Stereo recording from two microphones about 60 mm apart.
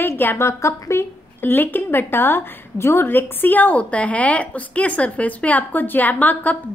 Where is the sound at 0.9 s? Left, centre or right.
Left.